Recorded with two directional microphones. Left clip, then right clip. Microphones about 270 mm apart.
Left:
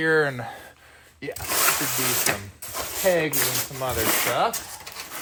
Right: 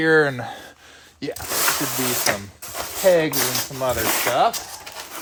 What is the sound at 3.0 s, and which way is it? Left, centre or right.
Speech, right.